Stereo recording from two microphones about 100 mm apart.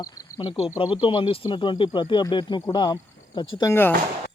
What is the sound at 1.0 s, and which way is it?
Speech, 60° left (ahead or behind).